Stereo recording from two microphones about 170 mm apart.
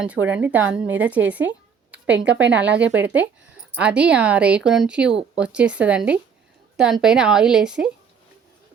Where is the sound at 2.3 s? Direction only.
90° right.